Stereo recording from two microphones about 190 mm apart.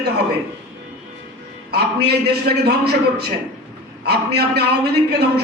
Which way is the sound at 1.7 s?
60° right (ahead or behind).